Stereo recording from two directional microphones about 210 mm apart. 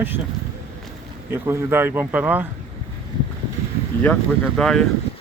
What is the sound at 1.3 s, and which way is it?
Speech, 10° right (ahead or behind).